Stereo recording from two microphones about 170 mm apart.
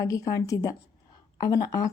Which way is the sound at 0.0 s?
20° left (ahead or behind).